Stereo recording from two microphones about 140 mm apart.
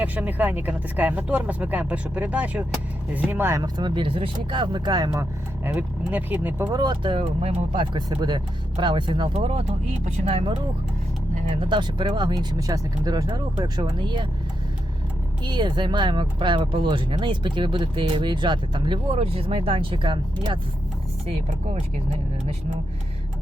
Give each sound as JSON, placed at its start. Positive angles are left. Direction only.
{"t": 0.0, "sound": "speech", "side_deg": -10}
{"t": 3.6, "sound": "speech", "side_deg": -35}
{"t": 5.6, "sound": "speech", "side_deg": -10}
{"t": 6.7, "sound": "speech", "side_deg": -35}
{"t": 9.3, "sound": "speech", "side_deg": -45}
{"t": 11.6, "sound": "speech", "side_deg": -35}
{"t": 15.4, "sound": "speech", "side_deg": -30}
{"t": 21.2, "sound": "speech", "side_deg": -50}